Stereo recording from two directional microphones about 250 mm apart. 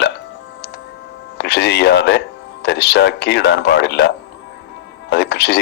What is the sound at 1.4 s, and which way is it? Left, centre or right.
Speech, left.